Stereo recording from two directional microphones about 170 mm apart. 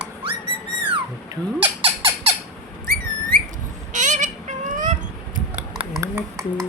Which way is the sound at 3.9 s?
45° right (ahead or behind).